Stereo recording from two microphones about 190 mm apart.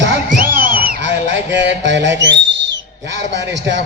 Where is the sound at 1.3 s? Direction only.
65° right (ahead or behind).